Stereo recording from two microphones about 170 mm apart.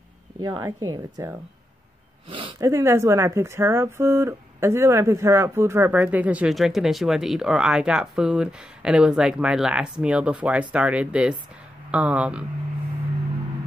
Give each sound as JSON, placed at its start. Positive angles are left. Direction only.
{"t": 0.4, "sound": "speech", "side_deg": -20}
{"t": 2.6, "sound": "speech", "side_deg": -15}